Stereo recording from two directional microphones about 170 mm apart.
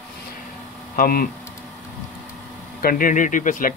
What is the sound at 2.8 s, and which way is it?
Speech, 55° left (ahead or behind).